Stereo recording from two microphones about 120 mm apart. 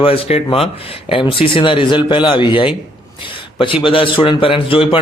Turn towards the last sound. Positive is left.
turn(degrees=45)  # may be behind; listen again after turning